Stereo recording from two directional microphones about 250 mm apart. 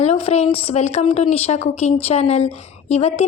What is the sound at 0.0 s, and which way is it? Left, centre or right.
Speech, left.